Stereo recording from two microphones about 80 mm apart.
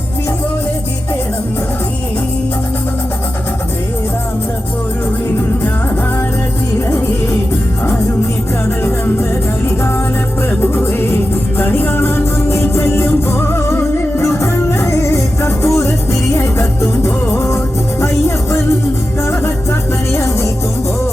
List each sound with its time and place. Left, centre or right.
6.7 s music: left
10.6 s music: left
20.1 s music: left